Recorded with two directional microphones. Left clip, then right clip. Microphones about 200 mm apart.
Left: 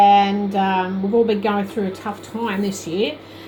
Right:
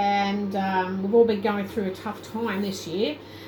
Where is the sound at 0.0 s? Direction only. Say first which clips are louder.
Left 11 dB; 35° left (ahead or behind).